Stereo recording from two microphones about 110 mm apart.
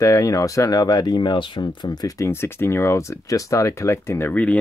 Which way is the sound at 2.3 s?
20° left (ahead or behind).